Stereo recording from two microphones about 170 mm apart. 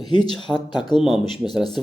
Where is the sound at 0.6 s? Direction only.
25° left (ahead or behind).